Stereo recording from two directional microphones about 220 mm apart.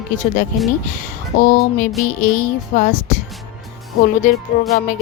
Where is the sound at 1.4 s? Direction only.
35° left (ahead or behind).